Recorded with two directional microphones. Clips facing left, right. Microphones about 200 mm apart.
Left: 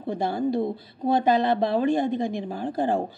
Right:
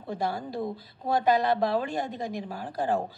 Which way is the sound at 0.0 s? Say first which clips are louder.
Left 6 dB; 20° left (ahead or behind).